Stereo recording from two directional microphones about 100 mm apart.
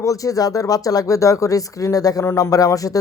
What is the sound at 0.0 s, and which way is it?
Speech, 35° left (ahead or behind).